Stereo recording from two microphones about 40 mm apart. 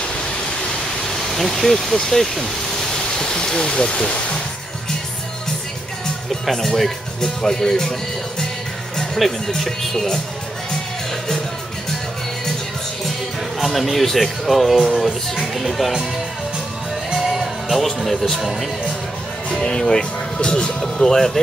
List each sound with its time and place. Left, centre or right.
1.0 s vehicle: centre
2.0 s speech: centre
6.4 s speech: centre
8.9 s speech: centre
13.6 s speech: centre
17.2 s music: centre
18.3 s speech: centre
19.6 s speech: centre
20.8 s speech: centre